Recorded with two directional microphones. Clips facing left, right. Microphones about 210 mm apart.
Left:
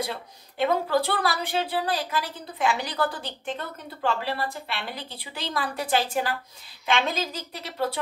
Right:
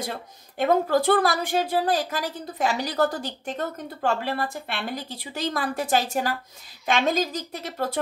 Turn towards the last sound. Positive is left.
turn(degrees=-45)  # may be behind; listen again after turning